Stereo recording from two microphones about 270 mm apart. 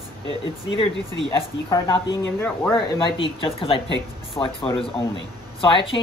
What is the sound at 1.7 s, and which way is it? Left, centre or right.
Speech, centre.